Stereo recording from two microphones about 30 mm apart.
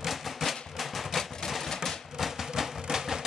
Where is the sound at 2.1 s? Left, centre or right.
Centre.